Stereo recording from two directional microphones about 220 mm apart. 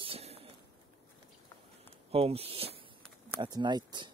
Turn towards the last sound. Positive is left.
turn(degrees=-20)  # may be behind; listen again after turning